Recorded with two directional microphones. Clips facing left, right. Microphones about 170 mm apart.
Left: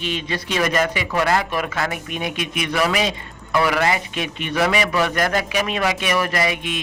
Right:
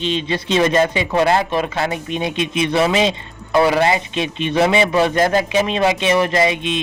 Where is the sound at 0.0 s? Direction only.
25° right (ahead or behind).